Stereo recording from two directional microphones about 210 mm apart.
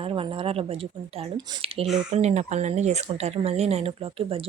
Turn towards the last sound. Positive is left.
turn(degrees=-25)  # may be behind; listen again after turning